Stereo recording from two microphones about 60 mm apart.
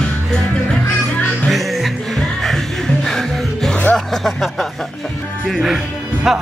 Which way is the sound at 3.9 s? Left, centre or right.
Centre.